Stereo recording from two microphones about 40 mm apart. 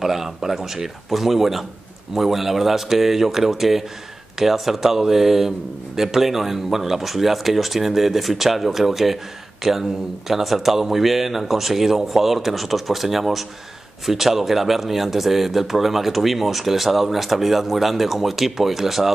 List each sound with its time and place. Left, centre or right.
0.0 s speech: centre